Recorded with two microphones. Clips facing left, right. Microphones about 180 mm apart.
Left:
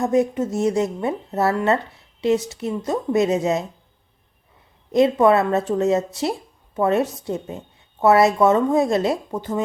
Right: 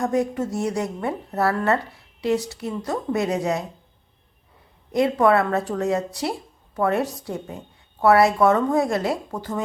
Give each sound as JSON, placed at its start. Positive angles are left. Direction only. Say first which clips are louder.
{"t": 0.0, "sound": "a woman's voice", "louder": "left 3 dB", "side_deg": 20}
{"t": 4.9, "sound": "a woman's voice", "louder": "left 3 dB", "side_deg": 20}